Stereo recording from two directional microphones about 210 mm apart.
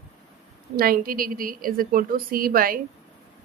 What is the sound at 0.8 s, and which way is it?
A woman's voice, 45° right (ahead or behind).